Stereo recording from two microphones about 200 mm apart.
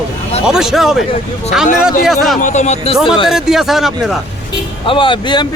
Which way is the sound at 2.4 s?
35° left (ahead or behind).